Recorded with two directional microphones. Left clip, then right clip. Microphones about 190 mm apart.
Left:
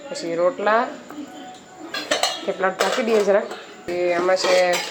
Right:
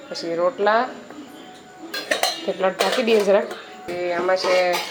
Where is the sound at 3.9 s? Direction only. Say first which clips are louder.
Left 2 dB; 5° left (ahead or behind).